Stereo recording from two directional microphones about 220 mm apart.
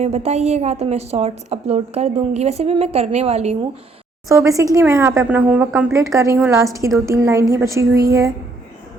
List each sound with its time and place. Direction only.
0.0 s a woman's voice: 30° right (ahead or behind)
4.3 s speech: 15° right (ahead or behind)